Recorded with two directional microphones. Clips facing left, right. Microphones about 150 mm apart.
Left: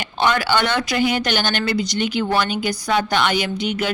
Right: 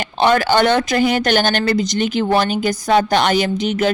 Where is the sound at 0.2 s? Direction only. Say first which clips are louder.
Right 5 dB; 40° right (ahead or behind).